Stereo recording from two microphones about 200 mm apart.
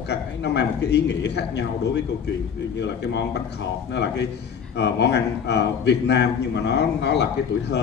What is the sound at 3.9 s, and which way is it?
A man's voice, 60° left (ahead or behind).